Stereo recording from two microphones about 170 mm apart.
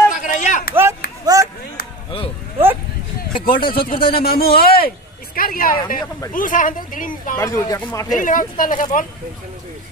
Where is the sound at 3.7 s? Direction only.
60° left (ahead or behind).